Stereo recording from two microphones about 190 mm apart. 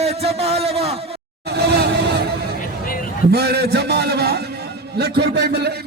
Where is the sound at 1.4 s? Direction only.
60° right (ahead or behind).